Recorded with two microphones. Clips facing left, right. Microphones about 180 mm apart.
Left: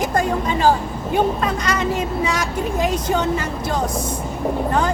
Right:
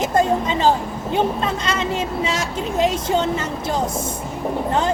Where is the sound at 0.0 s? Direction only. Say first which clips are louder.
Right 2 dB; 25° right (ahead or behind).